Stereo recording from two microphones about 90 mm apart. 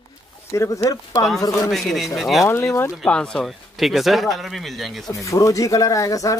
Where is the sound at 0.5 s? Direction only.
35° left (ahead or behind).